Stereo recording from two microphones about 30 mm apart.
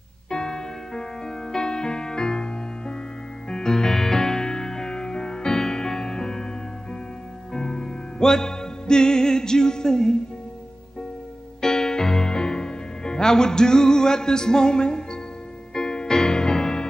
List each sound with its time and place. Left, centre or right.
0.3 s music: left
11.6 s music: centre